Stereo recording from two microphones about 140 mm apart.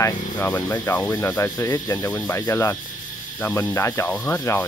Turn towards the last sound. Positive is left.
turn(degrees=15)  # may be behind; listen again after turning